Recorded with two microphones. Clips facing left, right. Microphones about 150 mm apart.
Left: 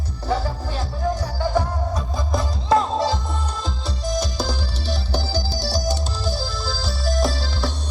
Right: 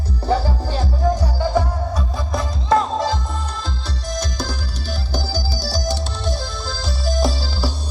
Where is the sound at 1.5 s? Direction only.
Centre (ahead or behind).